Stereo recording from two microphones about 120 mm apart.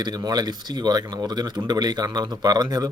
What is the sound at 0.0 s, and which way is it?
A man's voice, 35° right (ahead or behind).